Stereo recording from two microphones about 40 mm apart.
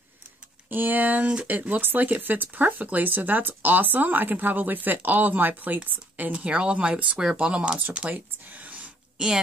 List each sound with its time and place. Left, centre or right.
0.7 s speech: right
1.2 s speech: right
1.5 s speech: right
6.3 s speech: right
8.1 s speech: right